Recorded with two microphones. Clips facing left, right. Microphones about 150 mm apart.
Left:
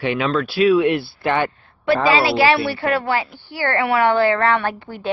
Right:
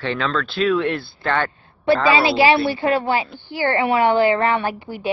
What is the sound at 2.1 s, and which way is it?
Speech, 20° right (ahead or behind).